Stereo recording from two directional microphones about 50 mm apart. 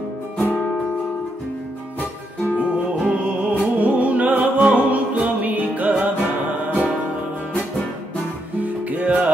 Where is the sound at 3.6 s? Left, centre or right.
Right.